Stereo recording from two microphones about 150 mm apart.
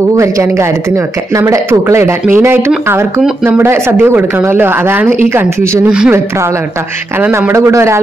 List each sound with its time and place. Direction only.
0.2 s speech: 20° right (ahead or behind)